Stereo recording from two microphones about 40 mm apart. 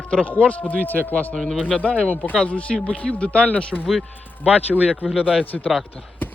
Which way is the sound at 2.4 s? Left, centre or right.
Left.